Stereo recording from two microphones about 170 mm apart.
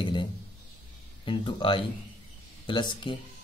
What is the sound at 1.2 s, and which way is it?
Speech, 30° left (ahead or behind).